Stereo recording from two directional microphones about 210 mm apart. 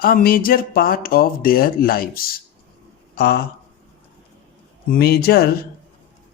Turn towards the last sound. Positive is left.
turn(degrees=50)  # may be behind; listen again after turning